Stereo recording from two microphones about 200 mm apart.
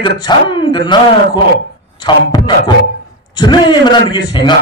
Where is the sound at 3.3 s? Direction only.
20° left (ahead or behind).